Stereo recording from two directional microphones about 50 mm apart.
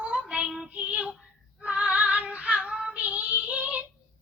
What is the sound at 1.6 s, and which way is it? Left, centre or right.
Female singing, right.